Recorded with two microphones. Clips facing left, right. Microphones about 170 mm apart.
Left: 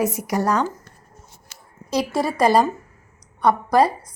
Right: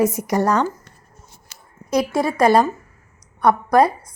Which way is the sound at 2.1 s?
10° left (ahead or behind).